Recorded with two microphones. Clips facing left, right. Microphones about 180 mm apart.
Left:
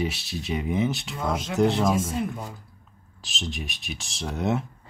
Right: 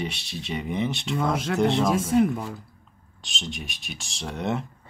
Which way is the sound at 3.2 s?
Centre (ahead or behind).